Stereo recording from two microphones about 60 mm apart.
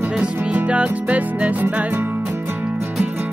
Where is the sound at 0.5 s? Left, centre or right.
Right.